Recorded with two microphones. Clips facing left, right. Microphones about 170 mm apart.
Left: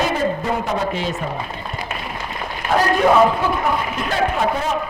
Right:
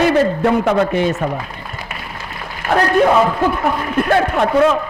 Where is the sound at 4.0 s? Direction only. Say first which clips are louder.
Right 5 dB; 60° right (ahead or behind).